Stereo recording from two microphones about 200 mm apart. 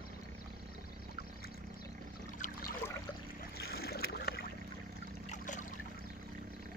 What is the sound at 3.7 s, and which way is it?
Boat, 50° left (ahead or behind).